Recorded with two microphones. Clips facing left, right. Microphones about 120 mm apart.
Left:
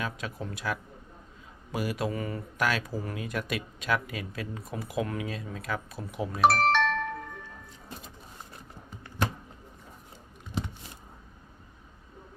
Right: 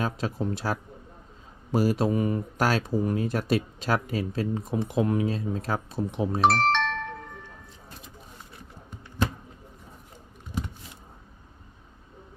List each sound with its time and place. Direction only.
0.0 s speech: 30° right (ahead or behind)
2.1 s speech: 20° right (ahead or behind)
2.6 s speech: 35° right (ahead or behind)
6.4 s music: 5° left (ahead or behind)